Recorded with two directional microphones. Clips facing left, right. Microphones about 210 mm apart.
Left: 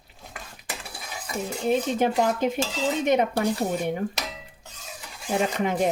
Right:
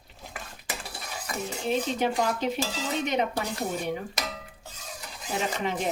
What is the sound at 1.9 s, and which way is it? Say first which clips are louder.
Speech: left 4 dB; 50° left (ahead or behind).